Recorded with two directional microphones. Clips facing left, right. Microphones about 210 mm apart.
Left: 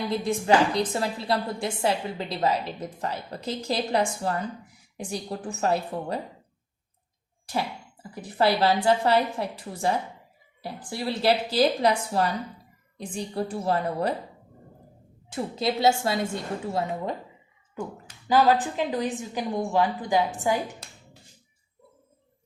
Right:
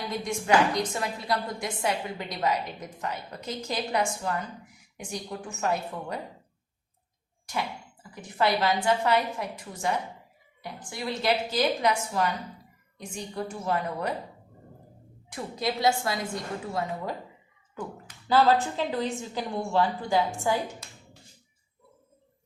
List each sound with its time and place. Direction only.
0.1 s a woman's voice: 30° left (ahead or behind)
8.1 s a woman's voice: 35° left (ahead or behind)
15.3 s a woman's voice: 25° left (ahead or behind)
18.3 s a woman's voice: 15° left (ahead or behind)